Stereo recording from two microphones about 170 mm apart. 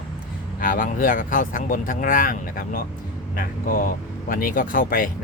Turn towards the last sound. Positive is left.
turn(degrees=55)  # may be behind; listen again after turning